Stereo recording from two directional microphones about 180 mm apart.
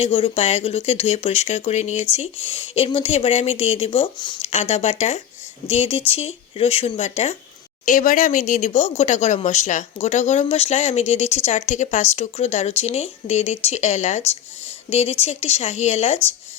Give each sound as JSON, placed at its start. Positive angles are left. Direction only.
{"t": 0.0, "sound": "speech", "side_deg": 30}